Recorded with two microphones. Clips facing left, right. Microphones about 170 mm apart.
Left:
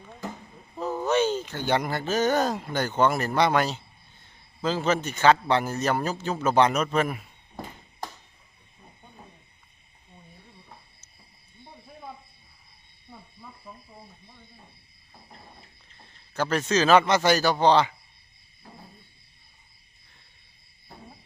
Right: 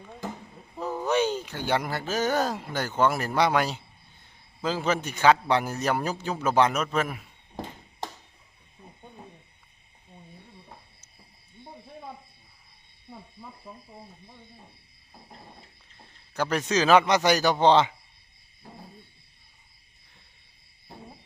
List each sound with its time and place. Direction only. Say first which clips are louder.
1.0 s speech: left 1 dB; 15° right (ahead or behind)
16.3 s speech: left 1 dB; 15° right (ahead or behind)